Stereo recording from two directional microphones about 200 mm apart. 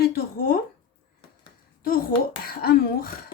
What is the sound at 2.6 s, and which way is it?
Speech, 50° left (ahead or behind).